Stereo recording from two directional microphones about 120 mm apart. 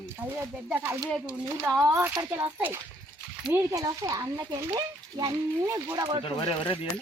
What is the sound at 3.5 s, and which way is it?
Speech, 30° right (ahead or behind).